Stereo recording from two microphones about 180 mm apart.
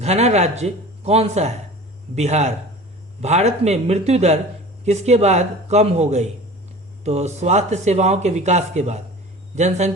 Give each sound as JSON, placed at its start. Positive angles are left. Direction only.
{"t": 0.0, "sound": "speech", "side_deg": -35}